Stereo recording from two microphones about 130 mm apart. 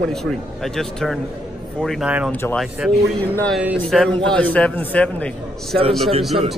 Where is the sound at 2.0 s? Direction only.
10° right (ahead or behind).